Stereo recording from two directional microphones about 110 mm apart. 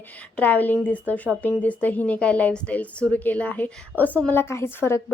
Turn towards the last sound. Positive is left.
turn(degrees=20)  # may be behind; listen again after turning